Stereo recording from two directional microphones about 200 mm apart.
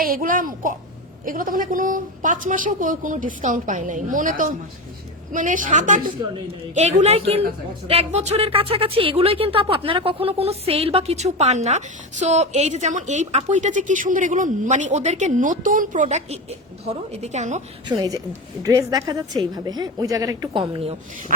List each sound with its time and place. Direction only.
0.0 s a child's voice: 45° right (ahead or behind)
17.8 s a woman's voice: 20° right (ahead or behind)